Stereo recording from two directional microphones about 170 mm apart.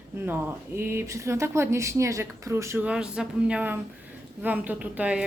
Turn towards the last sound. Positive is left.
turn(degrees=-5)  # may be behind; listen again after turning